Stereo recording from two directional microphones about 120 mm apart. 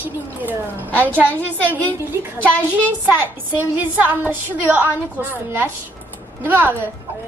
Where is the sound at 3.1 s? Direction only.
15° right (ahead or behind).